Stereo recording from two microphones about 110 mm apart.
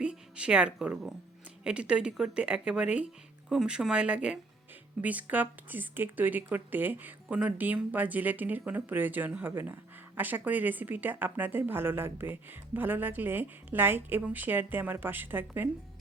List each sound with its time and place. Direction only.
0.0 s speech: 10° right (ahead or behind)